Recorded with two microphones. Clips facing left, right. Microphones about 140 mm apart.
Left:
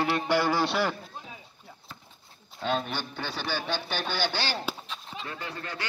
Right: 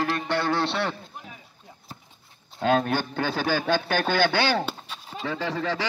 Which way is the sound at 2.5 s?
55° right (ahead or behind).